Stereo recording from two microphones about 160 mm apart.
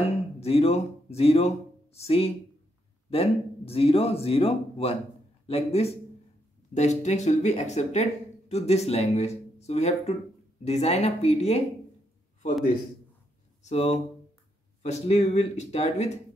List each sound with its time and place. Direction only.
0.4 s a man's voice: 40° left (ahead or behind)
13.6 s speech: 45° left (ahead or behind)